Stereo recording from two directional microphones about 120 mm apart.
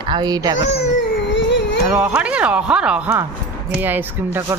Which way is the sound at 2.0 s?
10° right (ahead or behind).